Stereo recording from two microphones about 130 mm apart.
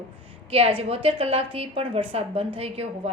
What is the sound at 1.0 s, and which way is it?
A woman's voice, 50° right (ahead or behind).